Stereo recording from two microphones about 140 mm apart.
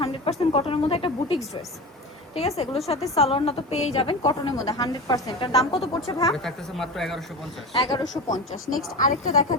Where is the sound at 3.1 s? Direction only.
45° left (ahead or behind); by 5.3 s 30° left (ahead or behind).